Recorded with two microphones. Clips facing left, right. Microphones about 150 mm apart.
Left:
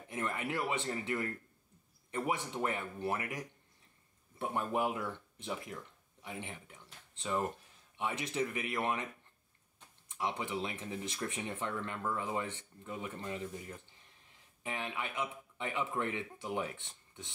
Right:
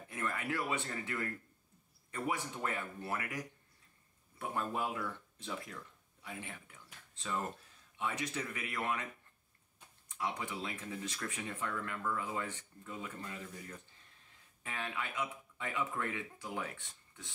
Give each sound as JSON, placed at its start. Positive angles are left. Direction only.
{"t": 0.1, "sound": "speech", "side_deg": 20}
{"t": 10.0, "sound": "speech", "side_deg": 20}